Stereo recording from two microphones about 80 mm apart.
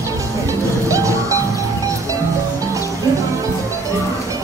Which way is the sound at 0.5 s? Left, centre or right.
Right.